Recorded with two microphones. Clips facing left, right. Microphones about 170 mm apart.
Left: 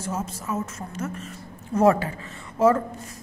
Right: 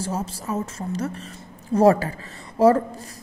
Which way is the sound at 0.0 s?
35° right (ahead or behind).